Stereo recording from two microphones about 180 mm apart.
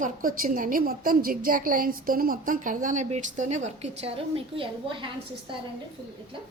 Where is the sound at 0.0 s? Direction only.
50° right (ahead or behind); by 5.0 s 30° right (ahead or behind).